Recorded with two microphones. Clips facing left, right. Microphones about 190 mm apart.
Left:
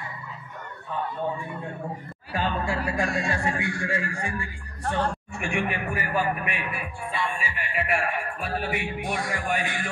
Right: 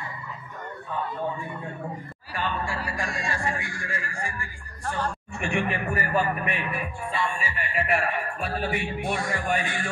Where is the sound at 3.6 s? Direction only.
75° left (ahead or behind).